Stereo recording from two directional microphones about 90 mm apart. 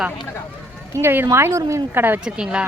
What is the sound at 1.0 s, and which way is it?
A woman's voice, 25° right (ahead or behind).